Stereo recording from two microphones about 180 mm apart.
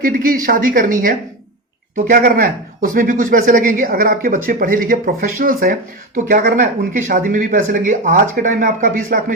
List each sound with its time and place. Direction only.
0.0 s speech: 50° right (ahead or behind)